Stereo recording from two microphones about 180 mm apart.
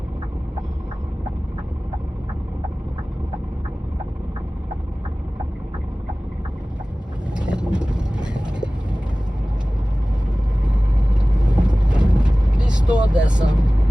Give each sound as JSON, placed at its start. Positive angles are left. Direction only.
{"t": 7.3, "sound": "vehicle", "side_deg": -5}
{"t": 11.5, "sound": "vehicle", "side_deg": -25}
{"t": 11.8, "sound": "vehicle", "side_deg": -5}